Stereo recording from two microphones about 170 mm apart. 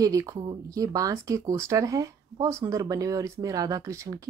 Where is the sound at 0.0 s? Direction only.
20° right (ahead or behind).